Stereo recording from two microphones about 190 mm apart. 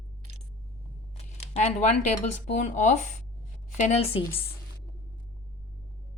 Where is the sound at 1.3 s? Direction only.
35° left (ahead or behind).